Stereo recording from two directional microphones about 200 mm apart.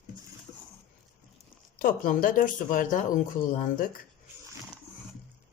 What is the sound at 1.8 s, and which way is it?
Speech, 45° left (ahead or behind).